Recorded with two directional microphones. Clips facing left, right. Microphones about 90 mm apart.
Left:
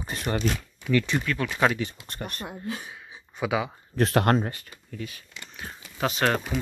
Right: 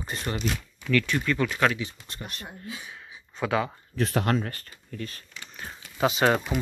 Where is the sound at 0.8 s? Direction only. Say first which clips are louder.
Left 1 dB; 20° left (ahead or behind).